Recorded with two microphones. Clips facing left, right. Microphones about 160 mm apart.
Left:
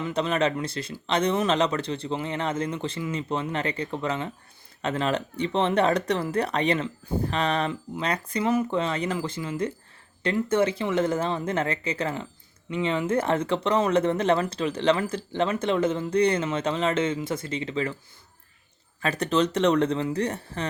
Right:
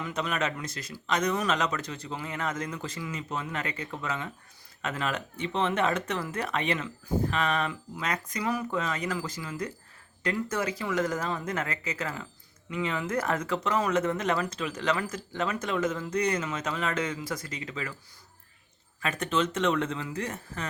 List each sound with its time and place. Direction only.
0.0 s speech: 30° left (ahead or behind)
18.9 s speech: 35° left (ahead or behind)